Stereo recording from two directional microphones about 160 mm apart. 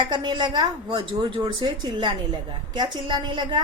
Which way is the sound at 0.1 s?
25° right (ahead or behind).